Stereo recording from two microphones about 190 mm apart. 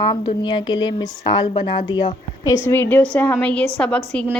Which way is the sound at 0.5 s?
25° left (ahead or behind).